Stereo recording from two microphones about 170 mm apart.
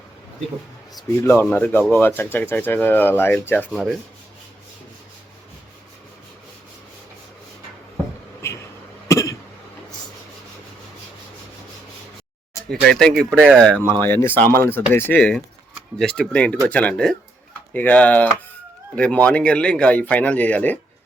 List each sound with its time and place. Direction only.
1.2 s speech: 10° left (ahead or behind)
3.7 s speech: centre (ahead or behind)
9.0 s cough: 15° left (ahead or behind)
12.8 s speech: 5° left (ahead or behind)